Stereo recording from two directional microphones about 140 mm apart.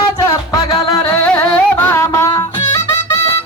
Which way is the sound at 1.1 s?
10° left (ahead or behind).